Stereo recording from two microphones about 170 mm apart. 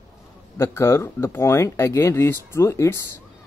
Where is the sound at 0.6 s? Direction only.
15° left (ahead or behind).